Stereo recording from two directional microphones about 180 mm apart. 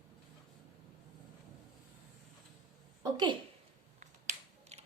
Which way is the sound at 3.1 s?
25° right (ahead or behind).